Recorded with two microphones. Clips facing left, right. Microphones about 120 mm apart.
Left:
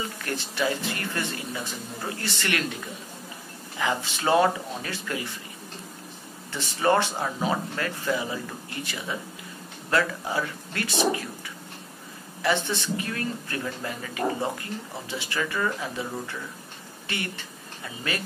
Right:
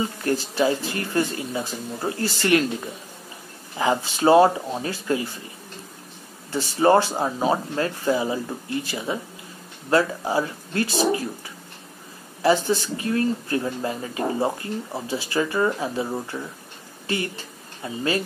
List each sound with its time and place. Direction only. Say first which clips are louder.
0.0 s speech: right 8 dB; 30° right (ahead or behind)
3.7 s speech: right 5 dB; 30° right (ahead or behind)
6.5 s speech: right 5 dB; 30° right (ahead or behind)
12.4 s speech: right 6 dB; 35° right (ahead or behind)